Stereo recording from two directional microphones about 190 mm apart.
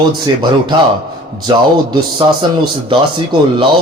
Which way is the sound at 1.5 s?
25° right (ahead or behind).